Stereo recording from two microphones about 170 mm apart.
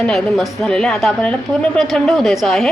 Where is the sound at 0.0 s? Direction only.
5° left (ahead or behind).